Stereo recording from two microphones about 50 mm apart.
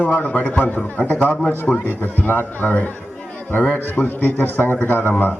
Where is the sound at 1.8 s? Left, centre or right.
Left.